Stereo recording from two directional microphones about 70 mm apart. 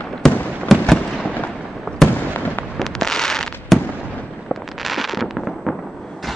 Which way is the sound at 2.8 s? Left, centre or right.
Centre.